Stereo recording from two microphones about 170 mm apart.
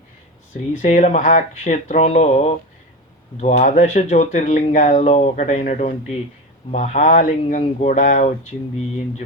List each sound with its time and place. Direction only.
0.8 s speech: 45° left (ahead or behind)